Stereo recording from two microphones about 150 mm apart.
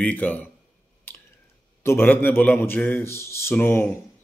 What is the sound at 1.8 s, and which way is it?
A man's voice, 15° left (ahead or behind).